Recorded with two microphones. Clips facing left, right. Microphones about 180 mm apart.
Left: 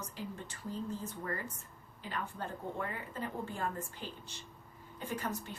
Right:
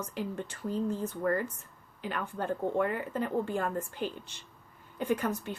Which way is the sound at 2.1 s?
65° right (ahead or behind).